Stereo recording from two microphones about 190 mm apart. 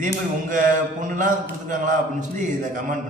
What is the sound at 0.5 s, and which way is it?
A man's voice, 45° right (ahead or behind).